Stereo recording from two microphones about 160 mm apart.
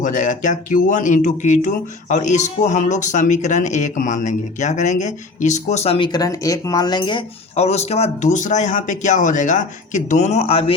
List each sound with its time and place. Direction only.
0.0 s speech: 50° left (ahead or behind)
6.1 s speech: 25° left (ahead or behind)